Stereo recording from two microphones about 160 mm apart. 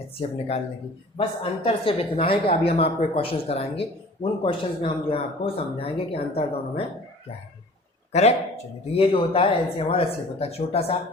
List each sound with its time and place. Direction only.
0.2 s speech: 40° left (ahead or behind)
9.0 s speech: 35° left (ahead or behind)